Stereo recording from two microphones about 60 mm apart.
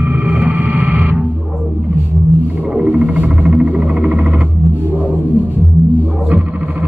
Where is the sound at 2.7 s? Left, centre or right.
Centre.